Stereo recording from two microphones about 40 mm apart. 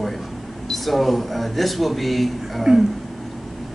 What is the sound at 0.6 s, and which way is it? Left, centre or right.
Speech, centre.